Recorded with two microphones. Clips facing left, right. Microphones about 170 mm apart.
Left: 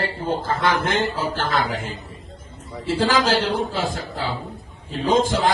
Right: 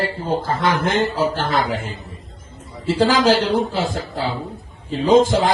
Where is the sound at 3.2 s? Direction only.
50° right (ahead or behind).